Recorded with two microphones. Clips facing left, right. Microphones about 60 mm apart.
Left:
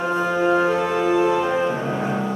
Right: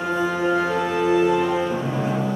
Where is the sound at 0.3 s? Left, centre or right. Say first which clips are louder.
Left 6 dB; centre.